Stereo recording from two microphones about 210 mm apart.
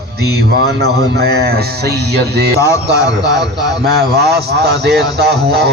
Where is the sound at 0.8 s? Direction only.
50° right (ahead or behind).